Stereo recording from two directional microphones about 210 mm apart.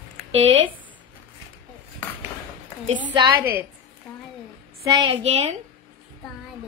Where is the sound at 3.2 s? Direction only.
10° right (ahead or behind).